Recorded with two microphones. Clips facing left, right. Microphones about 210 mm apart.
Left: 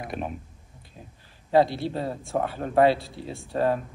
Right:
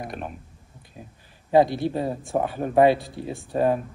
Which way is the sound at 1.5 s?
15° right (ahead or behind).